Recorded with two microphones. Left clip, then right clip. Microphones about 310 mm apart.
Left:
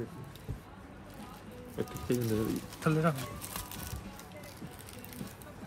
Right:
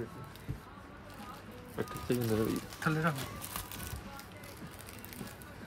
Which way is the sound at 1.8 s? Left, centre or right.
Centre.